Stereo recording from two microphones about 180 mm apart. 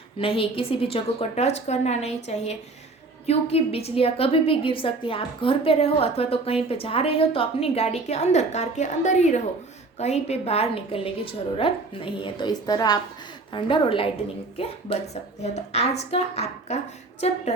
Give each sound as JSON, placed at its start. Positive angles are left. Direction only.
{"t": 0.2, "sound": "a woman's voice", "side_deg": 30}